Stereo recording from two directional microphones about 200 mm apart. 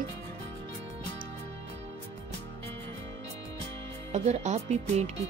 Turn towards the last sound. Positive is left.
turn(degrees=-35)  # may be behind; listen again after turning